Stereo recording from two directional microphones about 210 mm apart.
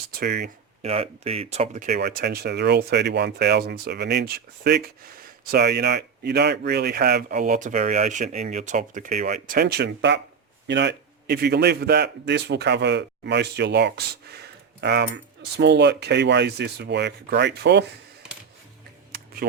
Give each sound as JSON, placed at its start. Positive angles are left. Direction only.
{"t": 0.2, "sound": "speech", "side_deg": -45}
{"t": 0.8, "sound": "speech", "side_deg": -30}
{"t": 9.6, "sound": "speech", "side_deg": -50}
{"t": 19.1, "sound": "computer keyboard", "side_deg": -45}